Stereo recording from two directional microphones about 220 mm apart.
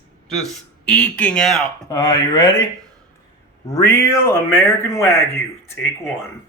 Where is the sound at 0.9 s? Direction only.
5° left (ahead or behind).